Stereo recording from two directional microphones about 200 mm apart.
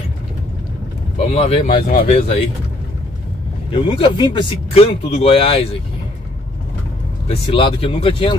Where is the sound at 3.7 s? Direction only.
25° left (ahead or behind).